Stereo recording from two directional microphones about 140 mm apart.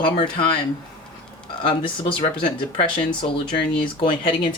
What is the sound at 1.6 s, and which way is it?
Speech, 40° left (ahead or behind).